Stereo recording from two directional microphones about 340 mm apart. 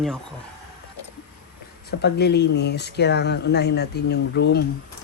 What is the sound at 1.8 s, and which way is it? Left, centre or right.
Speech, left.